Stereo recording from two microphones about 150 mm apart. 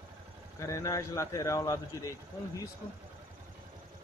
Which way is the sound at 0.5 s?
20° left (ahead or behind).